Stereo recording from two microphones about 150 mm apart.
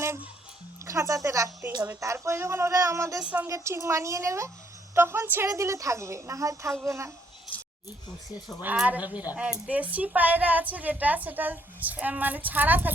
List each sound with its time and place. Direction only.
0.9 s a woman's voice: 25° right (ahead or behind)
3.2 s a woman's voice: 10° right (ahead or behind)
3.5 s a woman's voice: 20° right (ahead or behind)
8.6 s a woman's voice: 10° right (ahead or behind)